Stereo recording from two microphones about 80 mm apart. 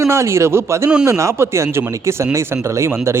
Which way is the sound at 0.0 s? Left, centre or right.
Right.